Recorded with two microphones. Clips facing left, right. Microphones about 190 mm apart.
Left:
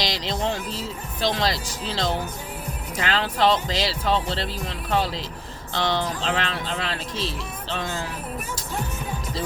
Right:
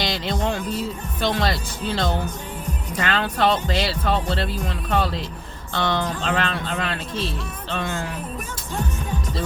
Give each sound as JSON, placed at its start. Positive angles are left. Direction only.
{"t": 0.0, "sound": "music", "side_deg": -55}
{"t": 0.8, "sound": "speech", "side_deg": -55}